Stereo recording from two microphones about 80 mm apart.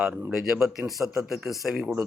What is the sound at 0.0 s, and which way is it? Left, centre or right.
A man's voice, centre.